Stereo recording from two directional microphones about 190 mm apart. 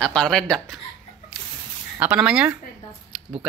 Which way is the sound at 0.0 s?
5° left (ahead or behind).